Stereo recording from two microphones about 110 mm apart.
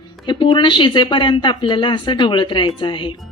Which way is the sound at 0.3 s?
45° left (ahead or behind).